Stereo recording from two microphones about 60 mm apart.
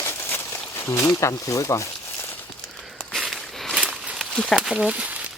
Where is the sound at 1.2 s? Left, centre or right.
Left.